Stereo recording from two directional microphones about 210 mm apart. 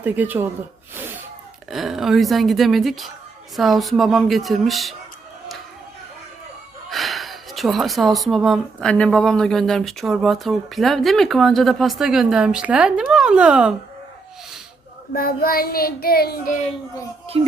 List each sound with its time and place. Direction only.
0.0 s speech: 10° right (ahead or behind)
1.7 s speech: centre (ahead or behind)
6.9 s speech: centre (ahead or behind)
15.1 s child singing: 45° left (ahead or behind)
17.3 s speech: 25° right (ahead or behind)